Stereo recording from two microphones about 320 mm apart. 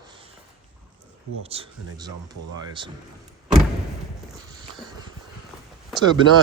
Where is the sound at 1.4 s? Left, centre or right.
Centre.